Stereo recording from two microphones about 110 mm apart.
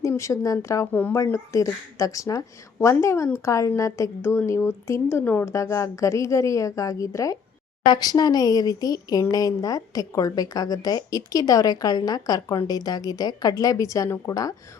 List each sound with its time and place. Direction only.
0.2 s a woman's voice: 30° left (ahead or behind)